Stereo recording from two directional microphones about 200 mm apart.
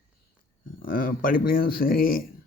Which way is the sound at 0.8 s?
45° left (ahead or behind).